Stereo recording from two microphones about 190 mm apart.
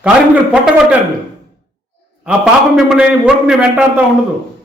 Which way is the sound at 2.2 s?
5° right (ahead or behind).